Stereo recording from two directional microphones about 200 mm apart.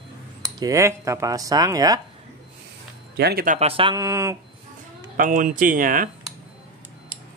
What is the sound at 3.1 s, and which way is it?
Speech, 50° right (ahead or behind).